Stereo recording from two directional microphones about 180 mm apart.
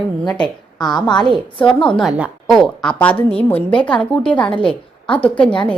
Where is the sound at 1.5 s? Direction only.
30° left (ahead or behind).